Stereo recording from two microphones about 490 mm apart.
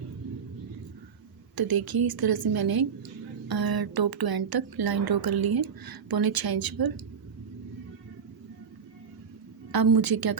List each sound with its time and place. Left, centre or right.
1.5 s a woman's voice: right
9.7 s a woman's voice: right